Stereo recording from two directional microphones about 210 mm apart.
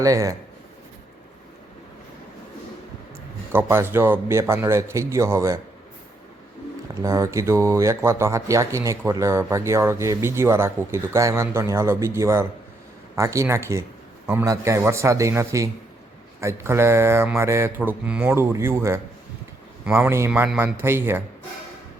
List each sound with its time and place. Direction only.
0.0 s speech: 15° right (ahead or behind)
3.5 s speech: 10° right (ahead or behind)
7.0 s speech: 15° right (ahead or behind)